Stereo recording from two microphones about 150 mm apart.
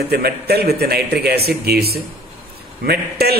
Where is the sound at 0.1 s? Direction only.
90° right.